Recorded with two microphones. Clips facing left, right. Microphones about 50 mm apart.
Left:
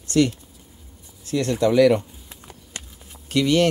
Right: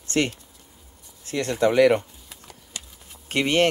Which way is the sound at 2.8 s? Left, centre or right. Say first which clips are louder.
Left 1 dB; left.